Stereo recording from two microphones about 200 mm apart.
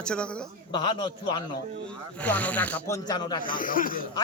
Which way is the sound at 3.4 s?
45° left (ahead or behind).